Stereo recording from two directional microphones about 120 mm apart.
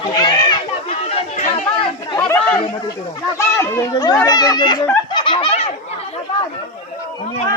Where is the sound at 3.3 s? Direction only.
25° left (ahead or behind).